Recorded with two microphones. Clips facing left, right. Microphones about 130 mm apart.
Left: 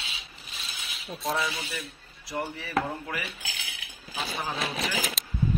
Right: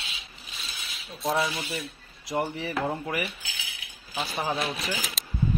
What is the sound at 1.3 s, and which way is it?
Speech, 25° right (ahead or behind).